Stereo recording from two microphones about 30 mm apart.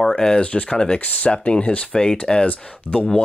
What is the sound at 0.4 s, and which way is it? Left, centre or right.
Speech, left.